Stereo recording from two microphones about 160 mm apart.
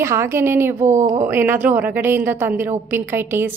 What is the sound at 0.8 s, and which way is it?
Speech, 50° right (ahead or behind).